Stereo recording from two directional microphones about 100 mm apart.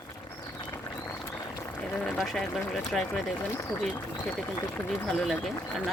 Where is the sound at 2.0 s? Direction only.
Centre (ahead or behind).